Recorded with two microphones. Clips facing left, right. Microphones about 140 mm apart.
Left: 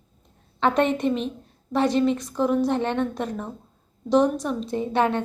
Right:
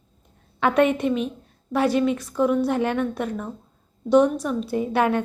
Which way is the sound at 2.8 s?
30° left (ahead or behind).